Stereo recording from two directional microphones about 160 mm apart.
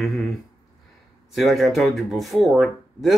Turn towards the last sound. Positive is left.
turn(degrees=0)  # may be behind; listen again after turning